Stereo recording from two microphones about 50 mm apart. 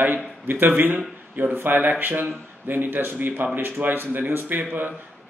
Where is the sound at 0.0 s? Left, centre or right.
Right.